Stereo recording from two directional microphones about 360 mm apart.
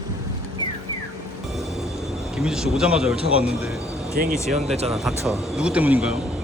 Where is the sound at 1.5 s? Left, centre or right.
Centre.